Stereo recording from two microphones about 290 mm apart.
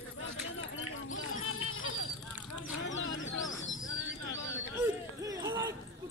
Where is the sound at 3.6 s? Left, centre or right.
Left.